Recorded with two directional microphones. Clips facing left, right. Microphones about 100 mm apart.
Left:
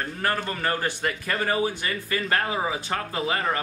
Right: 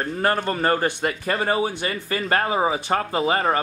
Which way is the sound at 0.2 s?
35° right (ahead or behind).